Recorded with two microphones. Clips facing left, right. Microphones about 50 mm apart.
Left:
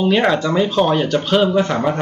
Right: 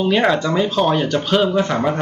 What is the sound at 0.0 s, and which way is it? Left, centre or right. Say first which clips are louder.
Speech: left 1 dB; centre.